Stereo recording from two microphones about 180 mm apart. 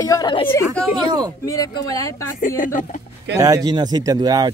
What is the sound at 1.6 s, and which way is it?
Speech, 20° left (ahead or behind).